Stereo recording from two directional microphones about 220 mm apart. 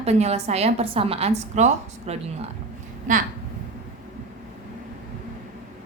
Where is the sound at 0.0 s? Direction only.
30° right (ahead or behind).